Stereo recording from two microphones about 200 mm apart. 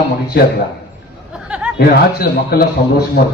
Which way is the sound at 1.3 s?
5° right (ahead or behind).